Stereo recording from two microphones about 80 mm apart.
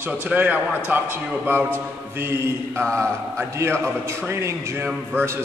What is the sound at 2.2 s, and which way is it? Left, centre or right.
Speech, right.